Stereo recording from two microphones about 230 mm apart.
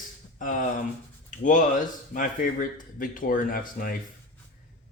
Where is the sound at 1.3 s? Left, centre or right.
Left.